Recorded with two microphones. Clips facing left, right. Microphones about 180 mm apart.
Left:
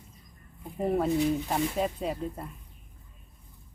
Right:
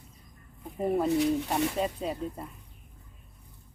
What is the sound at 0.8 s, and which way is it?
Speech, centre (ahead or behind).